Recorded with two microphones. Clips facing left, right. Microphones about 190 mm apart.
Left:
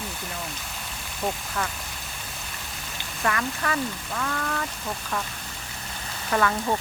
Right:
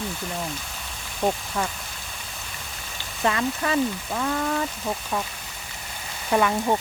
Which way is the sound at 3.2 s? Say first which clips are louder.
Right 3 dB; 20° right (ahead or behind).